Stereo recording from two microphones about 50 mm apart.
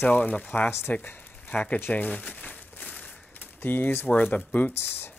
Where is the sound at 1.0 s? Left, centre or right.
Left.